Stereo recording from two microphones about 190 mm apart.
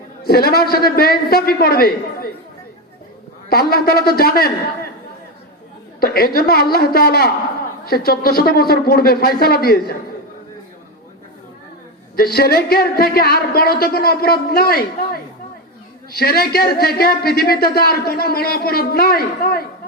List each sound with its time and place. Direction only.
0.3 s speech: 55° left (ahead or behind)
3.5 s speech: 55° left (ahead or behind)
6.0 s speech: 55° left (ahead or behind)
12.1 s speech: 55° left (ahead or behind)